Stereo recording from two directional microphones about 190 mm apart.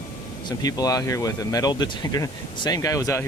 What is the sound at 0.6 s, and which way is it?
Speech, 20° left (ahead or behind).